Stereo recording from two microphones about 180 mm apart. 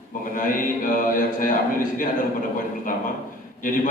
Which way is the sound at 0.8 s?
50° left (ahead or behind).